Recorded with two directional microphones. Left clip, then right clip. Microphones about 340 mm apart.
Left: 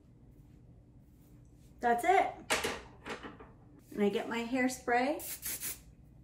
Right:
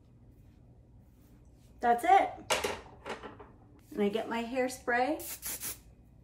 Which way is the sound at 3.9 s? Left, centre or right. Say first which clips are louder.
Right 1 dB; centre.